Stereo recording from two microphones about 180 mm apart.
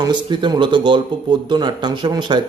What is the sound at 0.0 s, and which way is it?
Speech, 25° right (ahead or behind).